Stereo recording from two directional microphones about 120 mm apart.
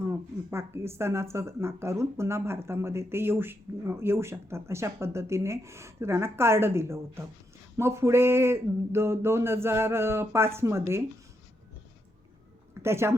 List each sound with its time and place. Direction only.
0.1 s speech: 20° right (ahead or behind)
12.7 s speech: 20° right (ahead or behind)